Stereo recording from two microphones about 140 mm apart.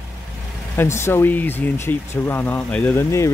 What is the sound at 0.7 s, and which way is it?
Speech, 15° left (ahead or behind).